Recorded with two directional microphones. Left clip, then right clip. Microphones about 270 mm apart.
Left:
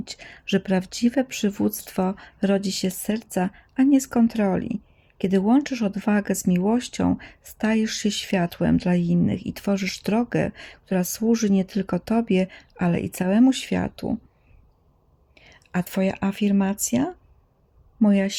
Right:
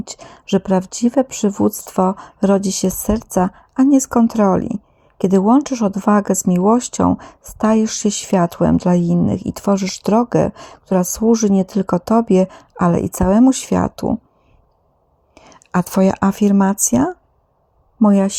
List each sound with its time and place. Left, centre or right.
0.0 s speech: centre
15.4 s speech: right
18.1 s speech: centre